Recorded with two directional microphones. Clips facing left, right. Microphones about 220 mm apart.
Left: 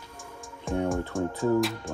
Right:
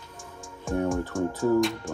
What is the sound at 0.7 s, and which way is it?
Speech, centre (ahead or behind).